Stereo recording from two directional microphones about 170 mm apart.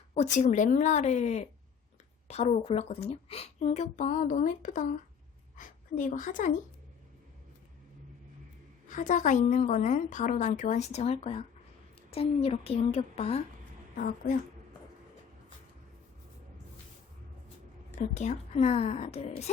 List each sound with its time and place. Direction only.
0.1 s a woman's voice: 40° left (ahead or behind)
8.9 s a woman's voice: 50° left (ahead or behind)
13.9 s a woman's voice: 50° left (ahead or behind)
18.1 s a woman's voice: 45° left (ahead or behind)